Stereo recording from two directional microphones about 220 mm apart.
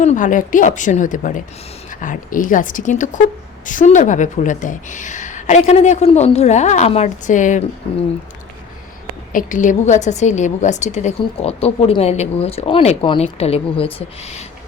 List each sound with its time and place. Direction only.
0.0 s a woman's voice: 35° left (ahead or behind)
9.3 s a woman's voice: 35° left (ahead or behind)